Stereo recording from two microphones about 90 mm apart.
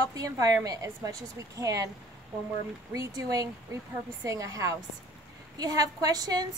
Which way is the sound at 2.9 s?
40° right (ahead or behind).